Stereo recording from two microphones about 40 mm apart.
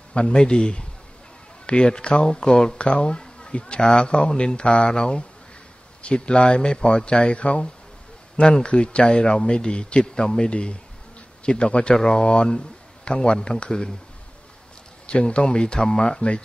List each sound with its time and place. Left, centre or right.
0.1 s speech: left
2.8 s speech: left
15.0 s speech: left